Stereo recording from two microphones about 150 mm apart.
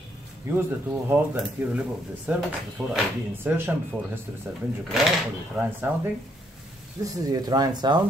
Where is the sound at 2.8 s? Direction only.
Centre (ahead or behind).